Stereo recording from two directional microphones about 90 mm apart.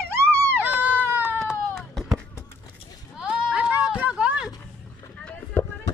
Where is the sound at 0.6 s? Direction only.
20° right (ahead or behind).